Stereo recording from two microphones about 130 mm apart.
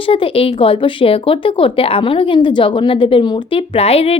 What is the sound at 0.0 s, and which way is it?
Speech, 45° left (ahead or behind).